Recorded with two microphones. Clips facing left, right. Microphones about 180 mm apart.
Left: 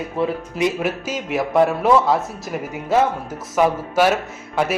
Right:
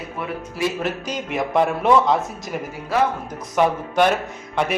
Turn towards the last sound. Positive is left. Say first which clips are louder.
# left 2 dB
turn(degrees=5)  # may be behind; listen again after turning